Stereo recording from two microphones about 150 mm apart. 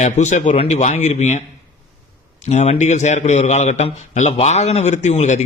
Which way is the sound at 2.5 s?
50° left (ahead or behind).